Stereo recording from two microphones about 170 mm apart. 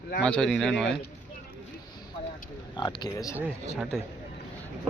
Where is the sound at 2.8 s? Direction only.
25° left (ahead or behind).